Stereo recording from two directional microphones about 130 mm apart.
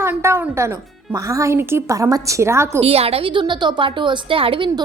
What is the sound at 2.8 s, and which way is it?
A woman's voice, 50° right (ahead or behind).